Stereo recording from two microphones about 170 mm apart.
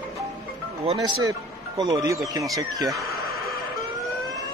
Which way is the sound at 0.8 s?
35° right (ahead or behind).